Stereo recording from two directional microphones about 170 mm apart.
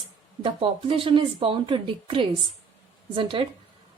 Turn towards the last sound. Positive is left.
turn(degrees=-30)  # may be behind; listen again after turning